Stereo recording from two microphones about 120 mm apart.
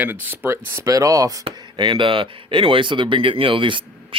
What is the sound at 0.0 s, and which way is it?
Speech, 15° right (ahead or behind).